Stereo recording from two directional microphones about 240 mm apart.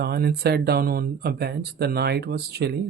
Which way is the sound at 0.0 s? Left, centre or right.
Right.